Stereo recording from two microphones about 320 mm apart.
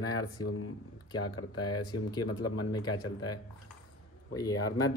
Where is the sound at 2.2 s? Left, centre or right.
Left.